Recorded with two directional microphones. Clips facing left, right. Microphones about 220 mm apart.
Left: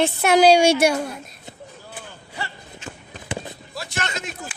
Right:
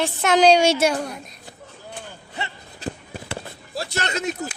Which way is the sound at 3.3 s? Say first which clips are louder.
Left 4 dB; 15° left (ahead or behind).